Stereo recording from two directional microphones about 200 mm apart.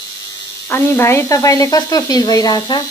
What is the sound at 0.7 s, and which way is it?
Speech, 15° left (ahead or behind).